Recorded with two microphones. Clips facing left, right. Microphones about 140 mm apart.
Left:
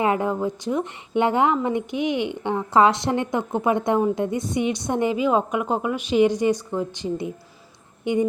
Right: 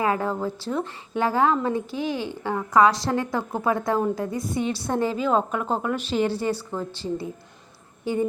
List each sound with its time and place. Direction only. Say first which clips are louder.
0.0 s a woman's voice: left 2 dB; 20° left (ahead or behind)